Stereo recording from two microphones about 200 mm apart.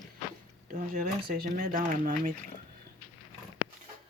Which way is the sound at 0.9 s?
45° right (ahead or behind).